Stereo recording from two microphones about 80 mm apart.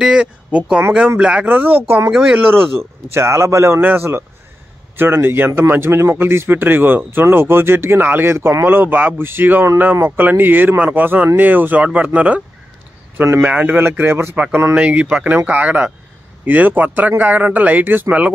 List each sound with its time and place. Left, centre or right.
0.0 s a man's voice: centre
2.0 s speech: centre
2.5 s a man's voice: right
13.4 s a man's voice: centre